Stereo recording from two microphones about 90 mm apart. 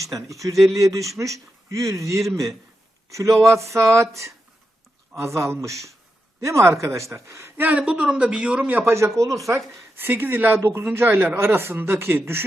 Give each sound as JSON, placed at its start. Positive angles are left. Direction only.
{"t": 0.2, "sound": "speech", "side_deg": -35}
{"t": 0.5, "sound": "speech", "side_deg": 0}
{"t": 0.8, "sound": "speech", "side_deg": -35}
{"t": 7.3, "sound": "speech", "side_deg": -25}
{"t": 10.0, "sound": "speech", "side_deg": -25}